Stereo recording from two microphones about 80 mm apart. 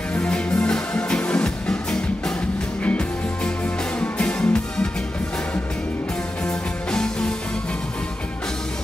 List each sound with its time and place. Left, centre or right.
0.1 s music: centre
4.0 s music: centre
6.4 s music: centre